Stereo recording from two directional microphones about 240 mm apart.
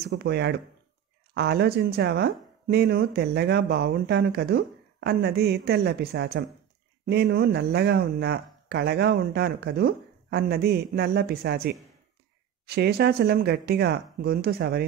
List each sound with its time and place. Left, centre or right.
0.0 s speech: right